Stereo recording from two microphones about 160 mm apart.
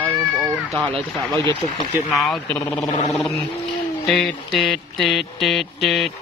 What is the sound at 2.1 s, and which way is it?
Mantra, centre (ahead or behind).